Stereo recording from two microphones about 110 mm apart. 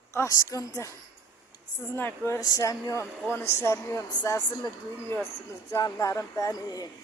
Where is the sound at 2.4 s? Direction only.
35° left (ahead or behind).